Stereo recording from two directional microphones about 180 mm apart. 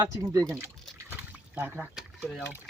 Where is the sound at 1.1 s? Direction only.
10° right (ahead or behind).